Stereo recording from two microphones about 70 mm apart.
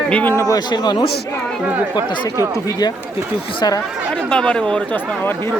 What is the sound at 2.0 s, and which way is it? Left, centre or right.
Speech, left.